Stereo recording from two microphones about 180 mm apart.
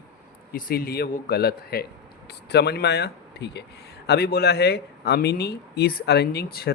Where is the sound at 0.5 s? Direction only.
55° left (ahead or behind).